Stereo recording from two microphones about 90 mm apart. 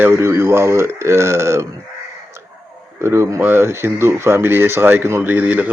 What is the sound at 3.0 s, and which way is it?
Speech, 25° right (ahead or behind).